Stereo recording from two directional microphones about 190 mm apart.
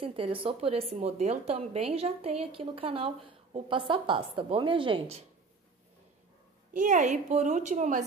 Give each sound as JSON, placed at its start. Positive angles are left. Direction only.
{"t": 0.0, "sound": "a woman's voice", "side_deg": -30}
{"t": 6.7, "sound": "speech", "side_deg": -45}